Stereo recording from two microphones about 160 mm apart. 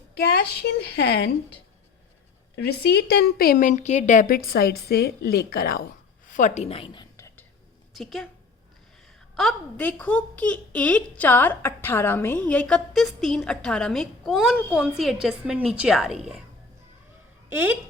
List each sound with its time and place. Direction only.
0.2 s a woman's voice: 90° left
2.6 s a woman's voice: 90° left; by 5.8 s 70° left (ahead or behind)
6.2 s a woman's voice: 50° left (ahead or behind); by 7.1 s 30° left (ahead or behind)
7.9 s a woman's voice: centre (ahead or behind)
17.5 s speech: 10° right (ahead or behind)